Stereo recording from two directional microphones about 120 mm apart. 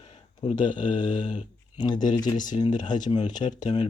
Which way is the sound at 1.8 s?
40° left (ahead or behind).